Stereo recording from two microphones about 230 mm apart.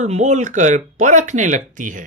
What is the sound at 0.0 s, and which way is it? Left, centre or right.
Speech, right.